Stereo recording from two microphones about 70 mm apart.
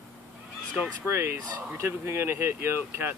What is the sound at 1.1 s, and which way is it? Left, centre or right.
Speech, right.